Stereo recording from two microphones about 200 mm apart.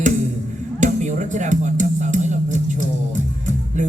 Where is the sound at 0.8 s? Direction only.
40° right (ahead or behind).